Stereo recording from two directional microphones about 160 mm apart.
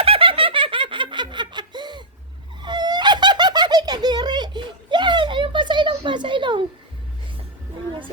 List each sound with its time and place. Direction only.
0.0 s laughter: 35° right (ahead or behind)
2.6 s baby laughter: 30° right (ahead or behind)